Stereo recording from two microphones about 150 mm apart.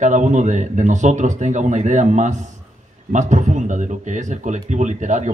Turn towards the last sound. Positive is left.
turn(degrees=-55)  # may be behind; listen again after turning